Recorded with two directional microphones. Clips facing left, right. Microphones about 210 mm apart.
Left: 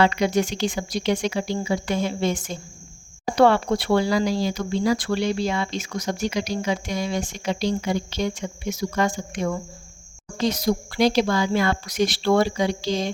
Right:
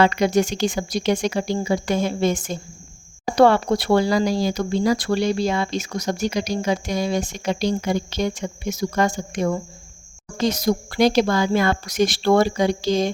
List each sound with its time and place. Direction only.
0.0 s speech: 45° right (ahead or behind)